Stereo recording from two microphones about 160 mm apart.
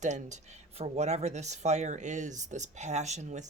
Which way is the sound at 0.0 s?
50° right (ahead or behind).